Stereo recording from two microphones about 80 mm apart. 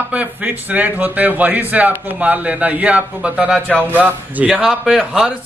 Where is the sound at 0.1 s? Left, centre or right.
Centre.